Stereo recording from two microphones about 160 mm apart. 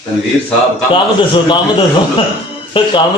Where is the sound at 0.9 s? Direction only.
30° left (ahead or behind).